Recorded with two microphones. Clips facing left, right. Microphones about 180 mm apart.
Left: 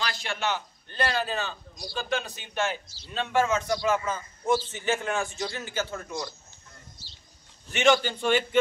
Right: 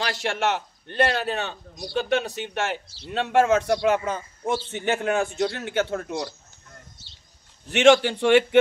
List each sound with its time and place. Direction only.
0.0 s a man's voice: 80° right
7.7 s a man's voice: 75° right (ahead or behind)